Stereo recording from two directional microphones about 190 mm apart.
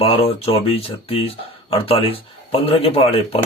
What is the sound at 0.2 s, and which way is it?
Speech, 30° left (ahead or behind).